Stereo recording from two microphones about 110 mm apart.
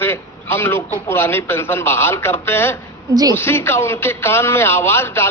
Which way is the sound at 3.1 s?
35° right (ahead or behind).